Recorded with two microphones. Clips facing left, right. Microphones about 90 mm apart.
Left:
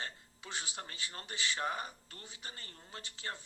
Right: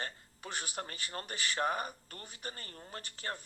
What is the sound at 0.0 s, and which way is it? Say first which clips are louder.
Speech: right 3 dB; 50° right (ahead or behind).